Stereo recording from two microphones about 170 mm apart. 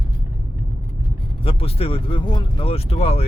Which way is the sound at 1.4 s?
35° left (ahead or behind).